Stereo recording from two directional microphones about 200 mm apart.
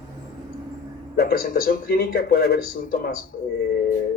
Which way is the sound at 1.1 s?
50° left (ahead or behind).